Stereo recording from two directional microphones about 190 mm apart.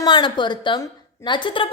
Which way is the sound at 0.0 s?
25° left (ahead or behind).